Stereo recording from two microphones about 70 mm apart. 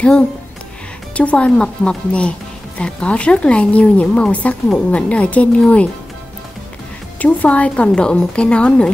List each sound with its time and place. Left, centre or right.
1.1 s speech: centre
7.2 s speech: left